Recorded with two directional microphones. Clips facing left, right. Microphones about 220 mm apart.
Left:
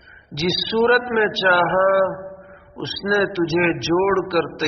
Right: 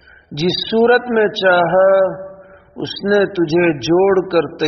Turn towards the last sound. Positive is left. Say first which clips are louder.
# right 6 dB
turn(degrees=-35)  # may be behind; listen again after turning